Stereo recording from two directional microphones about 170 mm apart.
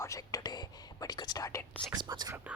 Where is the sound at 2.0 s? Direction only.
25° right (ahead or behind).